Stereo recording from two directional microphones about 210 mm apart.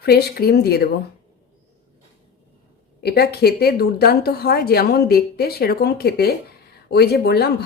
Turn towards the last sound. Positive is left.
turn(degrees=50)  # may be behind; listen again after turning